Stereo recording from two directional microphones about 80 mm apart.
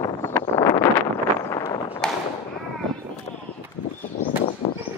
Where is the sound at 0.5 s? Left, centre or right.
Left.